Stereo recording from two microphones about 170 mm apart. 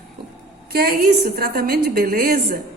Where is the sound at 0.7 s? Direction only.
60° right (ahead or behind).